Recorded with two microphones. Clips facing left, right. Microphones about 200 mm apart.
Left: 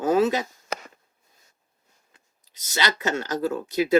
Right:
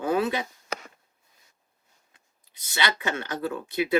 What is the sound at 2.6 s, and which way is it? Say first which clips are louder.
Speech: left 2 dB; 40° left (ahead or behind).